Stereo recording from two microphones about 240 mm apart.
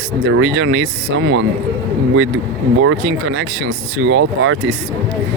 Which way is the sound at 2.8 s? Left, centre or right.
Right.